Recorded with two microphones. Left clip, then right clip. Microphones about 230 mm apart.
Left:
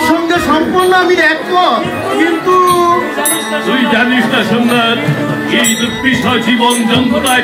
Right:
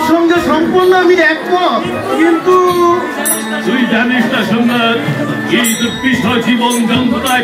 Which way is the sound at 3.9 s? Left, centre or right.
Left.